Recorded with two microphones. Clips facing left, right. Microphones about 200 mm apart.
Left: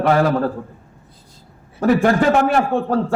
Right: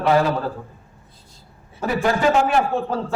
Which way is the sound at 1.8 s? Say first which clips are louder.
Left 6 dB; 55° left (ahead or behind).